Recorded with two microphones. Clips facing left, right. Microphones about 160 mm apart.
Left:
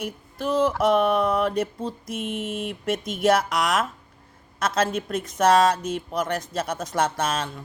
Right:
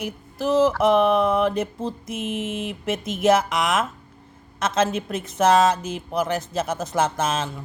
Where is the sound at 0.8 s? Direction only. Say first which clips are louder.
Right 2 dB; centre (ahead or behind).